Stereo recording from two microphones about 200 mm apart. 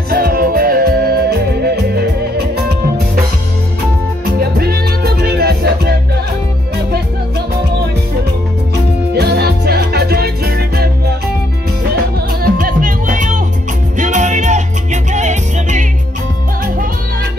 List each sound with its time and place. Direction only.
0.1 s music: 50° right (ahead or behind)
4.4 s music: 50° right (ahead or behind)
9.1 s music: 55° right (ahead or behind)
12.3 s music: 45° right (ahead or behind)